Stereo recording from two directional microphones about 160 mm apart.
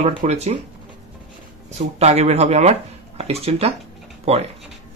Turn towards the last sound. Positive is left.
turn(degrees=-40)  # may be behind; listen again after turning